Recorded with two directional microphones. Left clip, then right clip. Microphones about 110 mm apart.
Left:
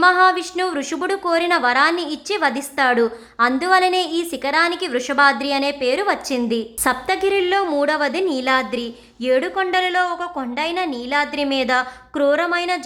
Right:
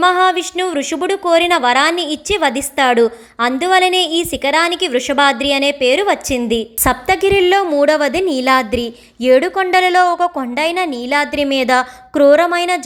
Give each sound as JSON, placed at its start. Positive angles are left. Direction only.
{"t": 0.0, "sound": "a woman's voice", "side_deg": -30}